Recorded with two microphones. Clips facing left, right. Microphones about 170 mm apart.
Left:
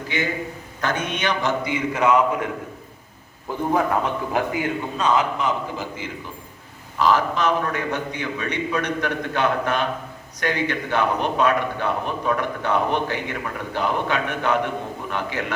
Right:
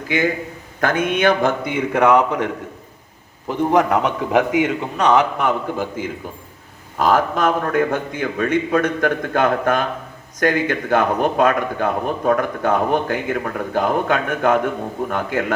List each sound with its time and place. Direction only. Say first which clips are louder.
0.8 s a man's voice: right 7 dB; 50° right (ahead or behind); by 2.5 s 70° right (ahead or behind)
3.5 s a man's voice: right 5 dB; 85° right; by 15.5 s 50° right (ahead or behind)